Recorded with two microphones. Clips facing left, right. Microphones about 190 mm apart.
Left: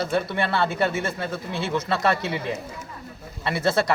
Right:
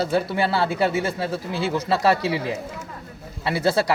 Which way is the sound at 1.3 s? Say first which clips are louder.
Right 2 dB; 35° right (ahead or behind).